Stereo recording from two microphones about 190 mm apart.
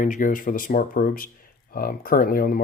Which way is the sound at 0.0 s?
45° left (ahead or behind).